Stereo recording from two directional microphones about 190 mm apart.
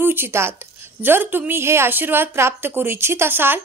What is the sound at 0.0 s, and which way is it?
A woman's voice, 10° right (ahead or behind).